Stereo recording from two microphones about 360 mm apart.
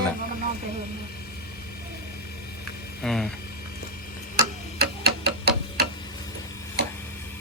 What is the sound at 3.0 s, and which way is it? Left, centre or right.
Speech, centre.